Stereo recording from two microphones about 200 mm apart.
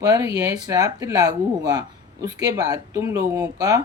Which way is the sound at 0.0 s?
20° right (ahead or behind).